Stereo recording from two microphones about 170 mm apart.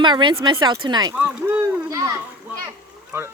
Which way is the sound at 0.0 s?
25° right (ahead or behind).